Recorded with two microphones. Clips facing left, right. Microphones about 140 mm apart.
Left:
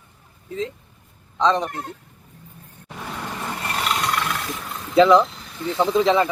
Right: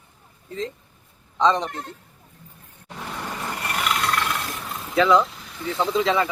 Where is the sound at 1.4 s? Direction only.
Centre (ahead or behind).